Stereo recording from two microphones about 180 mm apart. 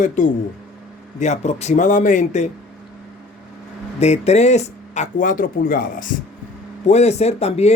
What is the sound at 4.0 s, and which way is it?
Speech, 35° left (ahead or behind).